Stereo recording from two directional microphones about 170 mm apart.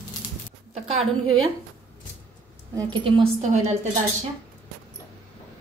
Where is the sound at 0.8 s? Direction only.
40° right (ahead or behind).